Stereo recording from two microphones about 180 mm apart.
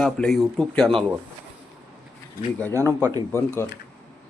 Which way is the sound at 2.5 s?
10° left (ahead or behind).